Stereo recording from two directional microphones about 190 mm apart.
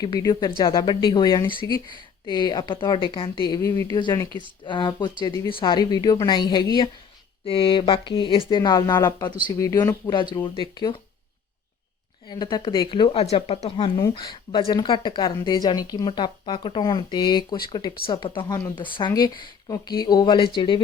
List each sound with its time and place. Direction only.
0.0 s speech: 20° left (ahead or behind)
12.3 s speech: 20° left (ahead or behind)